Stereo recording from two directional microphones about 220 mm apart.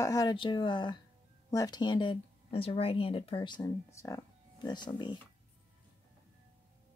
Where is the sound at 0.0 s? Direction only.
15° left (ahead or behind).